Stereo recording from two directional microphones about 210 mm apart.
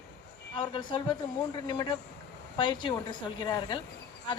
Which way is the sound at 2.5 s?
20° left (ahead or behind).